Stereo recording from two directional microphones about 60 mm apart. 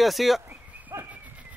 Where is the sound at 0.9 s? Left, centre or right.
Right.